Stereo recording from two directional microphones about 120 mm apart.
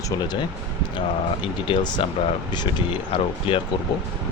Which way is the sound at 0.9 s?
40° left (ahead or behind).